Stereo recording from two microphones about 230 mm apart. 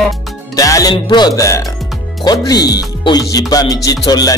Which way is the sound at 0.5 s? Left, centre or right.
Centre.